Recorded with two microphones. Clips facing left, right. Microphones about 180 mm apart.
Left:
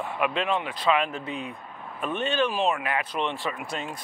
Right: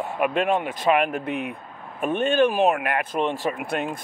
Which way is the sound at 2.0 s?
50° right (ahead or behind).